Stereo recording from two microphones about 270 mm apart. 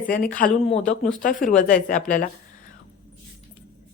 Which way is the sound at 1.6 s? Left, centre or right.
Left.